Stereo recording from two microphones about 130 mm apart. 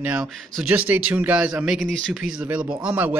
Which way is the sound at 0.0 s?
10° right (ahead or behind).